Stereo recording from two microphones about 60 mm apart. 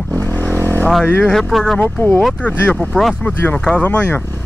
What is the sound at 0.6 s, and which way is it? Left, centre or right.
Vehicle, left.